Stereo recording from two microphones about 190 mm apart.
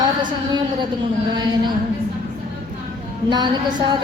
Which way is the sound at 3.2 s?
25° right (ahead or behind).